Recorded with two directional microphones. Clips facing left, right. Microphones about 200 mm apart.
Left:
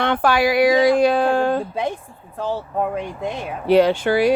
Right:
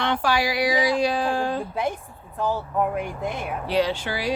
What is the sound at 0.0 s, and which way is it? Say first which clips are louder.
Speech: left 5 dB; 55° left (ahead or behind).